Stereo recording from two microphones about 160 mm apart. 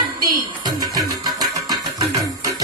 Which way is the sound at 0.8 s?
25° right (ahead or behind).